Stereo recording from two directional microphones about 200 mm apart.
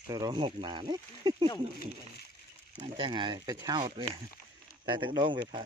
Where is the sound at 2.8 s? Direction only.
25° right (ahead or behind).